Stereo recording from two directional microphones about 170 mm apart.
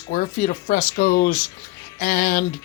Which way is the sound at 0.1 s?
50° left (ahead or behind).